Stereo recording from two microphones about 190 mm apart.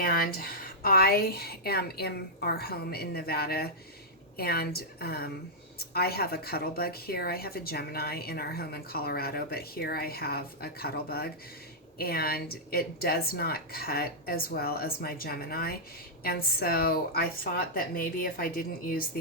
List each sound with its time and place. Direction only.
0.0 s speech: 50° left (ahead or behind)